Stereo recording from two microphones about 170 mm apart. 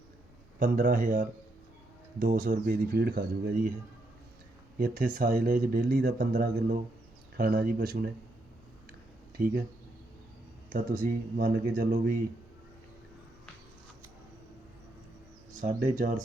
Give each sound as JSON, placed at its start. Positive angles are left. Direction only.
{"t": 0.6, "sound": "speech", "side_deg": -55}
{"t": 4.8, "sound": "speech", "side_deg": -55}
{"t": 9.4, "sound": "speech", "side_deg": -55}
{"t": 10.7, "sound": "speech", "side_deg": -55}
{"t": 15.5, "sound": "speech", "side_deg": -50}